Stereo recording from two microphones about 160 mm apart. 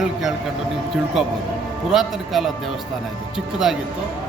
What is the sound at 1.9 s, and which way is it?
Speech, centre (ahead or behind).